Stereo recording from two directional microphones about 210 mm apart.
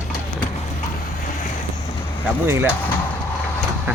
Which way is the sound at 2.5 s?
10° right (ahead or behind).